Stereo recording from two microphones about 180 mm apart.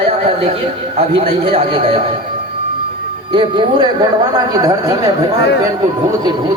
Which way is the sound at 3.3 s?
25° right (ahead or behind).